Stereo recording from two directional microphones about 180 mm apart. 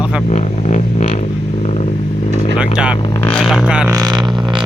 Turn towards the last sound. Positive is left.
turn(degrees=-25)  # may be behind; listen again after turning